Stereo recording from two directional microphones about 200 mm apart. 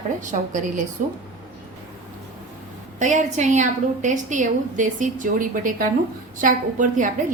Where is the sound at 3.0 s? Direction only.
40° right (ahead or behind).